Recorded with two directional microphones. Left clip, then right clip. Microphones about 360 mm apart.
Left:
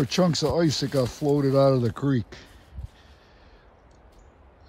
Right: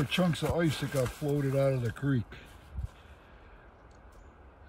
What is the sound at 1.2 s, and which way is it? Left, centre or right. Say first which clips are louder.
Speech: left 11 dB; left.